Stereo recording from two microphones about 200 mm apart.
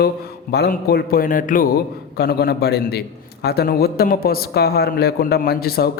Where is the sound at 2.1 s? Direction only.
55° left (ahead or behind).